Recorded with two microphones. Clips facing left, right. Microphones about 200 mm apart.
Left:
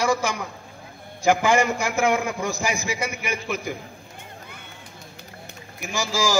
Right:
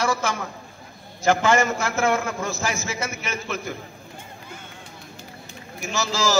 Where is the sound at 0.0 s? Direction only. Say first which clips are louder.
Left 1 dB; 15° left (ahead or behind).